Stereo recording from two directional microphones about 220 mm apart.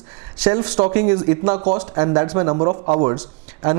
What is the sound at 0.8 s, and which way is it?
Speech, 25° right (ahead or behind).